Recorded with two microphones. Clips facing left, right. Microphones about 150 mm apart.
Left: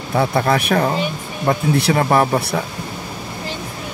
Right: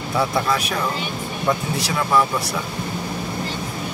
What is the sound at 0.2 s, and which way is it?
Speech, 60° left (ahead or behind).